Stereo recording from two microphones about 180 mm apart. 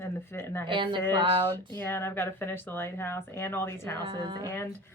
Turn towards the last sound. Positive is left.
turn(degrees=15)  # may be behind; listen again after turning